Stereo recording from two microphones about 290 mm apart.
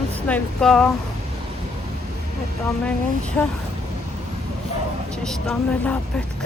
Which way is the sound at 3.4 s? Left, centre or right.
Centre.